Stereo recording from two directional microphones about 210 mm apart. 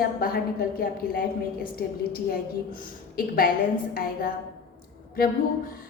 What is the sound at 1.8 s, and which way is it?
A woman's voice, 45° left (ahead or behind).